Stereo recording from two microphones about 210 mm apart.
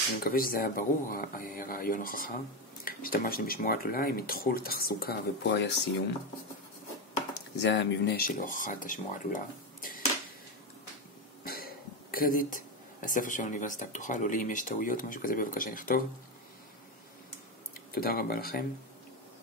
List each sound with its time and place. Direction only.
0.2 s speech: 45° left (ahead or behind)
7.6 s speech: 60° left (ahead or behind); by 10.0 s 40° left (ahead or behind)
11.4 s speech: 45° left (ahead or behind)
17.9 s speech: 45° left (ahead or behind)